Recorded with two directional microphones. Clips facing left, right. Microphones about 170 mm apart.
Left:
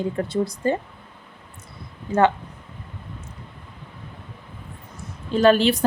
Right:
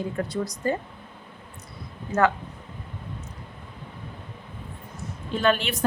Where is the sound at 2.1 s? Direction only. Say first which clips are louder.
Left 4 dB; 25° left (ahead or behind).